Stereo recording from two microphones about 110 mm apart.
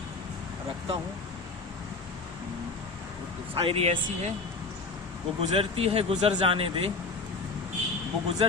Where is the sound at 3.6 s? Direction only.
60° right (ahead or behind).